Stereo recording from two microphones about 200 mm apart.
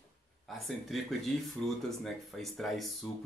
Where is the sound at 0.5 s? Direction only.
Centre (ahead or behind).